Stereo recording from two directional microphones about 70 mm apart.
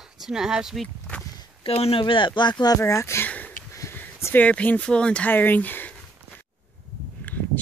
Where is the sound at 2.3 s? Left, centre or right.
Left.